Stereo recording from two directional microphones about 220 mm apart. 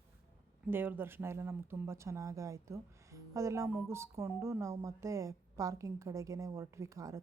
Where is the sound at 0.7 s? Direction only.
10° right (ahead or behind).